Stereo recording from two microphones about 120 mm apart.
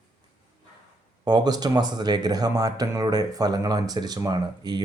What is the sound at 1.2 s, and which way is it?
Speech, 35° right (ahead or behind).